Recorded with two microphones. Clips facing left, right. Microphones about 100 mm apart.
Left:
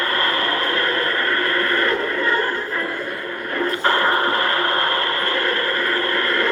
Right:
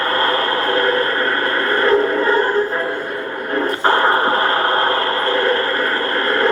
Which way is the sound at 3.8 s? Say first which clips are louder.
Right 4 dB; 35° right (ahead or behind).